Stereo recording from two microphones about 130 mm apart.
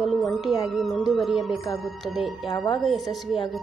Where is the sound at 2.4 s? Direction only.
35° left (ahead or behind).